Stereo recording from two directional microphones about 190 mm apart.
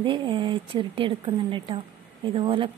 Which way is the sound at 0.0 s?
25° right (ahead or behind).